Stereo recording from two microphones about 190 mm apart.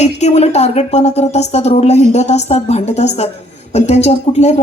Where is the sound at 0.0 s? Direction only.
35° left (ahead or behind).